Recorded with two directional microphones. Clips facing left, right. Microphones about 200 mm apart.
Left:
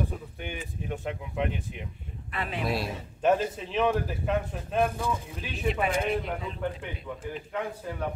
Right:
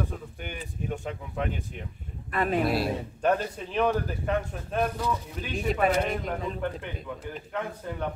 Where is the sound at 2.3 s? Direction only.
45° right (ahead or behind).